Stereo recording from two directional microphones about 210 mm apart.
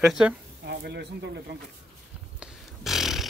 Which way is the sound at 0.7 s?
50° right (ahead or behind).